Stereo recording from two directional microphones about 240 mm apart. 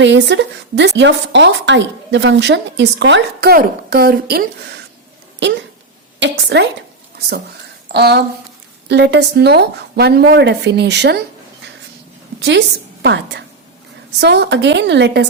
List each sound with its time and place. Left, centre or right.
0.0 s a woman's voice: right
7.9 s a woman's voice: right
12.4 s a woman's voice: right